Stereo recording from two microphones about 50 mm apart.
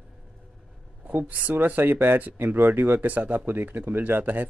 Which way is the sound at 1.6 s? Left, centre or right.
Right.